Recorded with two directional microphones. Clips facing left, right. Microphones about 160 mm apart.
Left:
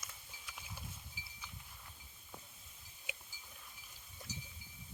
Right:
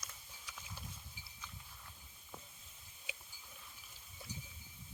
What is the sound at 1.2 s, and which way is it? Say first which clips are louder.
Chime: left 2 dB; 90° left.